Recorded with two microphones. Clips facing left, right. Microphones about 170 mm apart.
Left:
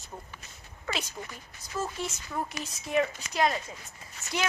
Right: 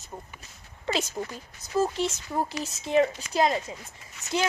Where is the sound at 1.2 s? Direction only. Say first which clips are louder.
Right 8 dB; 40° right (ahead or behind).